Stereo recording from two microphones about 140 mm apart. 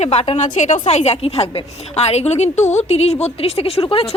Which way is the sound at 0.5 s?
60° left (ahead or behind).